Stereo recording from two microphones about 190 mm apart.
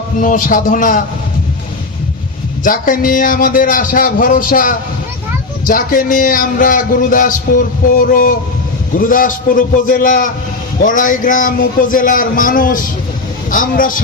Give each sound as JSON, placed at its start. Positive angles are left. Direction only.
{"t": 0.2, "sound": "a man's voice", "side_deg": 45}
{"t": 2.6, "sound": "a man's voice", "side_deg": 45}